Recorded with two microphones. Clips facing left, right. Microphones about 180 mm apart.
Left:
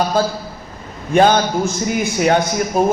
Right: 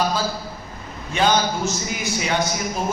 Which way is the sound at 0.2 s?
50° left (ahead or behind).